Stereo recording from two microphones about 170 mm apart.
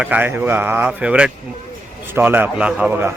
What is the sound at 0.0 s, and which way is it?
Speech, 10° right (ahead or behind).